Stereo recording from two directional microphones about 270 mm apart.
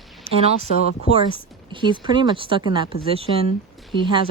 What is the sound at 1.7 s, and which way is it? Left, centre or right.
Speech, centre.